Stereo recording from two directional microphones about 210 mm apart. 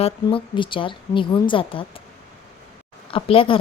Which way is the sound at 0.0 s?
25° left (ahead or behind).